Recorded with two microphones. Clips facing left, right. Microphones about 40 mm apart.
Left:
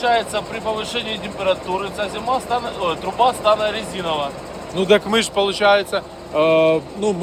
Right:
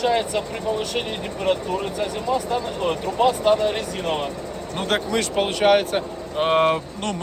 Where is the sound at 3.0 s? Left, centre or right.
Left.